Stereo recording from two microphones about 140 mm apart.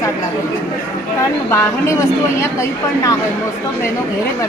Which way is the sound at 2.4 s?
20° left (ahead or behind).